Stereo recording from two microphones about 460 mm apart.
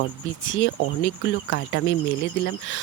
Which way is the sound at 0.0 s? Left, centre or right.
Left.